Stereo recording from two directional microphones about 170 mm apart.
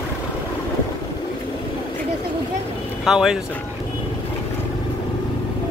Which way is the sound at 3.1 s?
Centre (ahead or behind).